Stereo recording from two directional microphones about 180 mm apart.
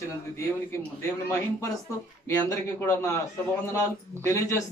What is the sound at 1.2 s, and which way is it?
A man's voice, 15° left (ahead or behind).